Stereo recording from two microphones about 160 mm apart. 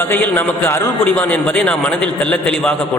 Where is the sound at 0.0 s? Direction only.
10° left (ahead or behind).